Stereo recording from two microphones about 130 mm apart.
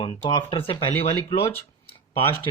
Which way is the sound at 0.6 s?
45° left (ahead or behind).